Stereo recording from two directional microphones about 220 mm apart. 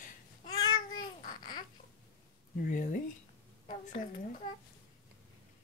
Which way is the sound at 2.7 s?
35° left (ahead or behind).